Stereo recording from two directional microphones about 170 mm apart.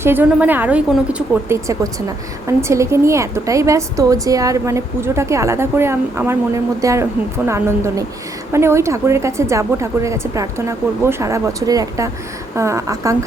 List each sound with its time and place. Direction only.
0.0 s a woman's voice: 10° right (ahead or behind)